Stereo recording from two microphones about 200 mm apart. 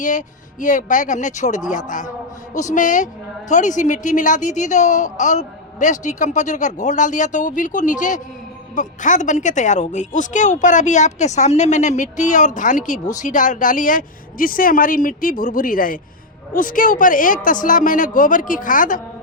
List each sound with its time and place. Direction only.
0.0 s a woman's voice: 40° left (ahead or behind)